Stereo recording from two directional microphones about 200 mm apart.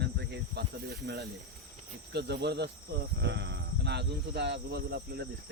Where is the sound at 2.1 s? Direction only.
55° right (ahead or behind).